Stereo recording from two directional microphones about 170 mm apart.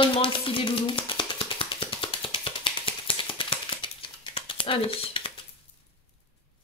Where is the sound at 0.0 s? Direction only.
30° left (ahead or behind).